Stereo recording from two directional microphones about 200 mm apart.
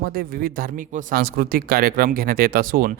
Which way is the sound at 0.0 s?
45° right (ahead or behind).